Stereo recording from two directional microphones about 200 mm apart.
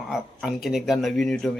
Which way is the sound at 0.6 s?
Centre (ahead or behind).